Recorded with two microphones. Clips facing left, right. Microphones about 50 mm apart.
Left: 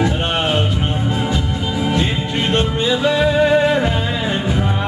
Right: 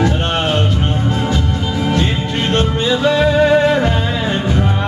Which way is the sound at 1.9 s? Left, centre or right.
Centre.